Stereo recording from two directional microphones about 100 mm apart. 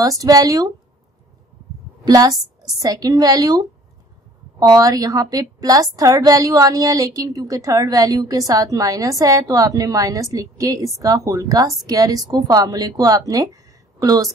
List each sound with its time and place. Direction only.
0.0 s a woman's voice: 35° right (ahead or behind)
2.0 s a woman's voice: 40° right (ahead or behind)